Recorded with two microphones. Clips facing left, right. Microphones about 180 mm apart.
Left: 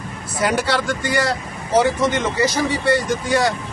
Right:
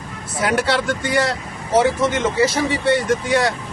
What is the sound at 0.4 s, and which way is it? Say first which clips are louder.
Speech: right 1 dB; centre (ahead or behind).